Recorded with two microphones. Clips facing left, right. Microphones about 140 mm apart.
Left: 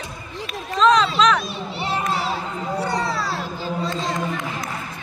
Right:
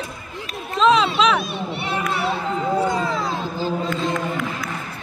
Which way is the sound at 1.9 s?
30° left (ahead or behind).